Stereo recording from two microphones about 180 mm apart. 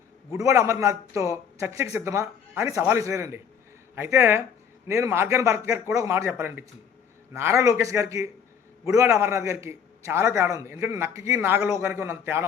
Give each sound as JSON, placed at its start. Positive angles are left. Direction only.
{"t": 0.3, "sound": "a man's voice", "side_deg": -15}